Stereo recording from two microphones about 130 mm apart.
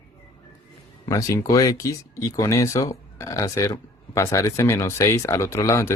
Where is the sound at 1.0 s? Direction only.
25° left (ahead or behind).